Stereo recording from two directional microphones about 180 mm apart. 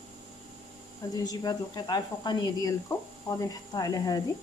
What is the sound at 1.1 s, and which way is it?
Speech, 20° left (ahead or behind).